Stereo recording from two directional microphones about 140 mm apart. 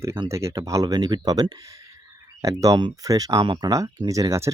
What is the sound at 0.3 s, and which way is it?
Speech, 20° right (ahead or behind).